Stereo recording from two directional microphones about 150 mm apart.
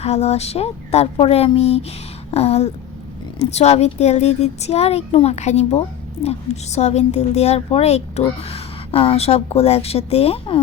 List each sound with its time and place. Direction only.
0.0 s a child's voice: 45° left (ahead or behind)